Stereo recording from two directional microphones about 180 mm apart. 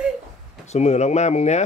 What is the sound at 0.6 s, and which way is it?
Speech, 40° left (ahead or behind).